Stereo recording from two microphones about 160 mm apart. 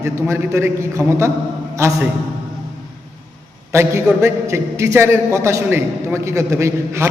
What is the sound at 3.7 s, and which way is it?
A man's voice, 15° right (ahead or behind).